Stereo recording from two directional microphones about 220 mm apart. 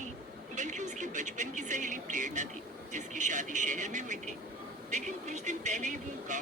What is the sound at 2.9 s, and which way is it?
Speech, 35° right (ahead or behind).